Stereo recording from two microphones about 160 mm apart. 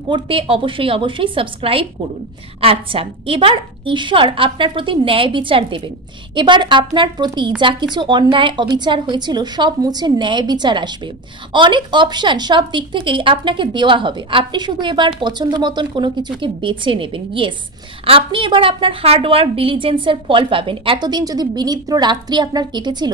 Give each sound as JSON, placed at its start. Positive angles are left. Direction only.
{"t": 0.1, "sound": "a woman's voice", "side_deg": -35}